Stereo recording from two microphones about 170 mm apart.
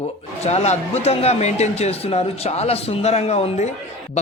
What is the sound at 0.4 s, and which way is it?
Speech, 40° left (ahead or behind).